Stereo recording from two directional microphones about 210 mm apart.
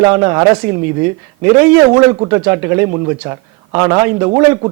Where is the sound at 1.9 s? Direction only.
25° right (ahead or behind).